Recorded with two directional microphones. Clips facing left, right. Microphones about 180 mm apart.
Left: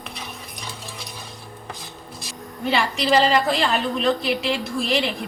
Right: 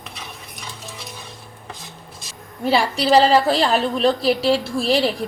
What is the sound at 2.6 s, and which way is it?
A woman's voice, 35° right (ahead or behind).